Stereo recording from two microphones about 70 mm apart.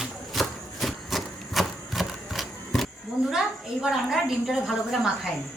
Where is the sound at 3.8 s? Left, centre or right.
Centre.